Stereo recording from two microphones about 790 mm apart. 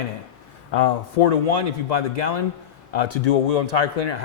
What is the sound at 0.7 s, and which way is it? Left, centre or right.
A man's voice, left.